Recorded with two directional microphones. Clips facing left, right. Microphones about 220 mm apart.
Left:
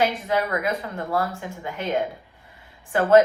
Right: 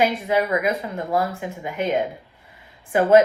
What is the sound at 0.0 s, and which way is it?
Speech, 15° right (ahead or behind).